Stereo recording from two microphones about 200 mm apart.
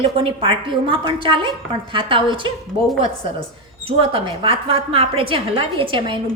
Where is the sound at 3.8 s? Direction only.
30° right (ahead or behind).